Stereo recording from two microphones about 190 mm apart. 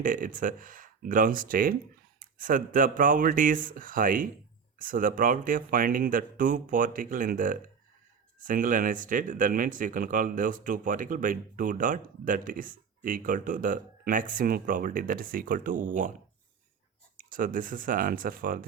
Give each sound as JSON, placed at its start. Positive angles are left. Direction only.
{"t": 0.0, "sound": "speech", "side_deg": -45}
{"t": 17.2, "sound": "speech", "side_deg": -45}